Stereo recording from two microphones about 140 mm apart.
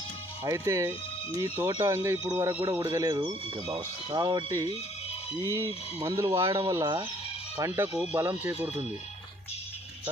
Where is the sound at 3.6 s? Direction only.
40° right (ahead or behind).